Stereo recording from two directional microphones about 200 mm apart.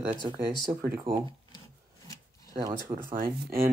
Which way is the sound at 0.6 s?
10° right (ahead or behind).